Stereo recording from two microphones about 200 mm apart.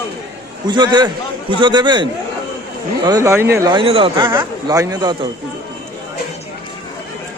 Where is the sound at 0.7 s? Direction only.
20° right (ahead or behind).